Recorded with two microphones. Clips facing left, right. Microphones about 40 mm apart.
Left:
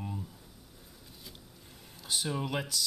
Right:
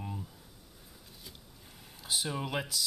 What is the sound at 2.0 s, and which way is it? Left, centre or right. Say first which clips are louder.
Speech: left 1 dB; centre.